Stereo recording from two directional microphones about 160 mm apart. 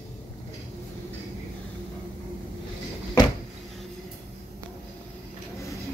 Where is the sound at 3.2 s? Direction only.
25° left (ahead or behind).